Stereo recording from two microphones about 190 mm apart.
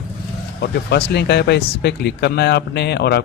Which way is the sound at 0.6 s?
60° left (ahead or behind).